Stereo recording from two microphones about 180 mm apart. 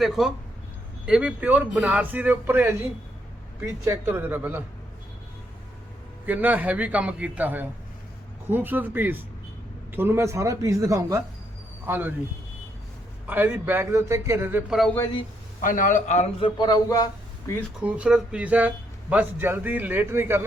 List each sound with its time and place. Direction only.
0.0 s a man's voice: centre (ahead or behind)
6.2 s a man's voice: 10° right (ahead or behind)
13.2 s a man's voice: 10° right (ahead or behind)
15.6 s a man's voice: 50° left (ahead or behind)
16.6 s speech: 20° left (ahead or behind)
17.8 s a man's voice: 5° right (ahead or behind)